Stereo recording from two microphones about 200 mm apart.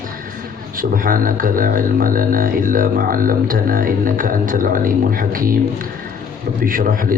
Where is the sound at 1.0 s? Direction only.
45° right (ahead or behind).